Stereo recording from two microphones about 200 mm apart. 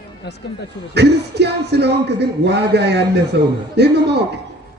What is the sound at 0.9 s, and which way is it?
A man's voice, 55° right (ahead or behind).